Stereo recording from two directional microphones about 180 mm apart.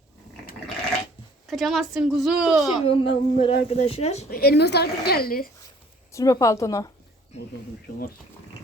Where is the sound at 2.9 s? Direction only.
30° left (ahead or behind).